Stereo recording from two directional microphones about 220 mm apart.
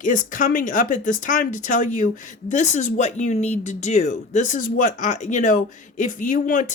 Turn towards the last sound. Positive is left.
turn(degrees=35)  # may be behind; listen again after turning